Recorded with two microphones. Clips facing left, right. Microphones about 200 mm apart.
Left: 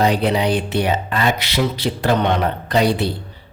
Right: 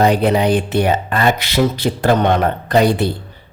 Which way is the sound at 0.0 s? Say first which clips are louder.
Right 3 dB; 50° right (ahead or behind).